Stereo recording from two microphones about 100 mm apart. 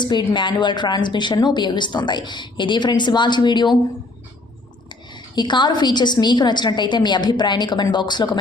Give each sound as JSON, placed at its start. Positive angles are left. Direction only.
{"t": 0.0, "sound": "a woman's voice", "side_deg": 50}
{"t": 4.9, "sound": "a woman's voice", "side_deg": 50}